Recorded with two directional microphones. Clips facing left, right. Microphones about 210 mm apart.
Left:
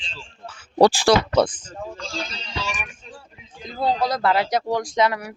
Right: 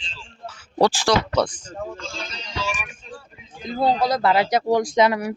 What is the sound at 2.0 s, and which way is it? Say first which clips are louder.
Speech: left 3 dB; 35° left (ahead or behind).